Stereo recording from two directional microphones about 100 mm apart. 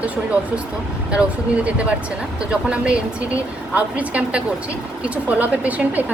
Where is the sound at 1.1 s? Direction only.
10° right (ahead or behind).